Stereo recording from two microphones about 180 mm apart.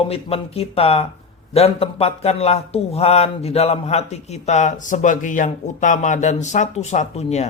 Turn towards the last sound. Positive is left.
turn(degrees=40)  # may be behind; listen again after turning